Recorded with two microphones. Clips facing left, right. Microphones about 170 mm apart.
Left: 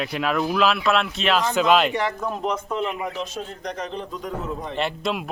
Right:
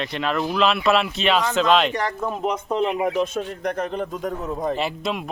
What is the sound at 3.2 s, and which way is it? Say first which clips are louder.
A man's voice: right 7 dB; 55° right (ahead or behind).